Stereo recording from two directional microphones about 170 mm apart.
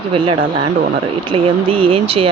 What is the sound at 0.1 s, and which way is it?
Speech, 30° right (ahead or behind).